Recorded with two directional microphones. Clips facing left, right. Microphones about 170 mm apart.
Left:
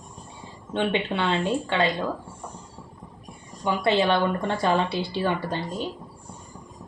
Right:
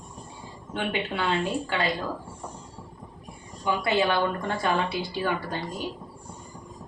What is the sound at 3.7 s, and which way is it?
Speech, 25° left (ahead or behind).